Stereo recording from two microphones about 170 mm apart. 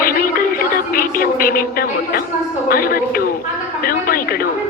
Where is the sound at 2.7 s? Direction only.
60° left (ahead or behind).